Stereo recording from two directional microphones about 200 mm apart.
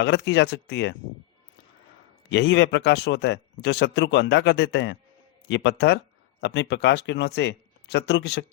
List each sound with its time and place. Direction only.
0.0 s speech: 55° left (ahead or behind)
2.3 s speech: 60° left (ahead or behind)